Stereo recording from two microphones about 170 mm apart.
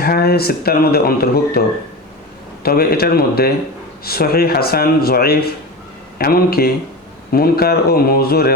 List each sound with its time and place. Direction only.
0.0 s speech: 65° left (ahead or behind)
2.6 s speech: 65° left (ahead or behind)